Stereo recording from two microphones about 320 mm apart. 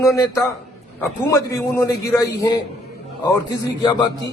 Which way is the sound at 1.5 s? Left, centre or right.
Centre.